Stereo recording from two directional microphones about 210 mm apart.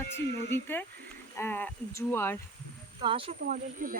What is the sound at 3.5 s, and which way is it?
Speech, 40° right (ahead or behind).